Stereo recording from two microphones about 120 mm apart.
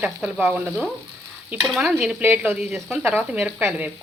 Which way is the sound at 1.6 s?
5° right (ahead or behind).